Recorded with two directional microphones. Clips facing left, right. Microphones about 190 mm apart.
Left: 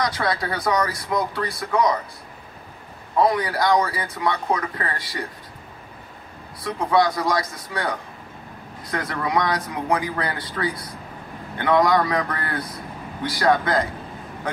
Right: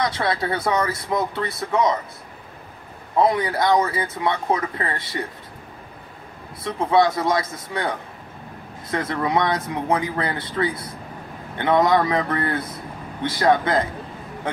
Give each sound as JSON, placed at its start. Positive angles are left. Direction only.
{"t": 0.0, "sound": "speech", "side_deg": -25}
{"t": 3.2, "sound": "speech", "side_deg": -25}
{"t": 6.6, "sound": "speech", "side_deg": -25}
{"t": 8.9, "sound": "speech", "side_deg": -25}